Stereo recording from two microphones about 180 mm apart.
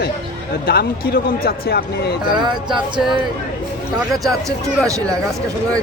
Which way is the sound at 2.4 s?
25° right (ahead or behind).